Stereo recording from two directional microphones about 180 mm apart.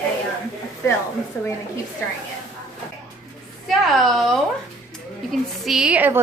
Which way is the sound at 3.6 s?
Centre (ahead or behind).